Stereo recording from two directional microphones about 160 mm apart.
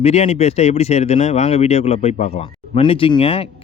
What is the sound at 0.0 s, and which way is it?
Speech, 40° left (ahead or behind).